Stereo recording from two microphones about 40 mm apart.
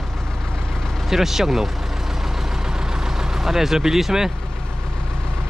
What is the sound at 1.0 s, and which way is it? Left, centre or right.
Speech, centre.